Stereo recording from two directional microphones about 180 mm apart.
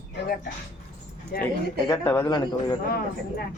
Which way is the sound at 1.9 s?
15° left (ahead or behind).